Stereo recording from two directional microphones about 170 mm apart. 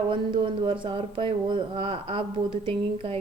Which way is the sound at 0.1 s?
30° right (ahead or behind).